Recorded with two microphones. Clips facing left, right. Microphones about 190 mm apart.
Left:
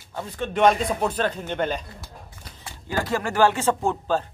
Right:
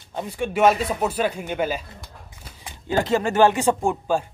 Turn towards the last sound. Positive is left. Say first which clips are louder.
# right 1 dB
turn(degrees=-10)  # may be behind; listen again after turning